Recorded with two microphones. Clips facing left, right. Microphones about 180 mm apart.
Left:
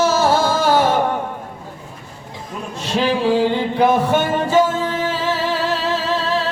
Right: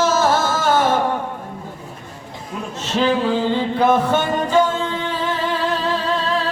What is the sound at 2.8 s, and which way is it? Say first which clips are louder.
Music: even; 10° left (ahead or behind).